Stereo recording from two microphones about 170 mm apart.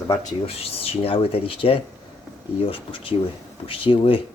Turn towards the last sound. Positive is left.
turn(degrees=30)  # may be behind; listen again after turning